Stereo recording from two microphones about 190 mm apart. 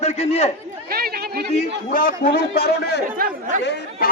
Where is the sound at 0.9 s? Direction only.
55° right (ahead or behind).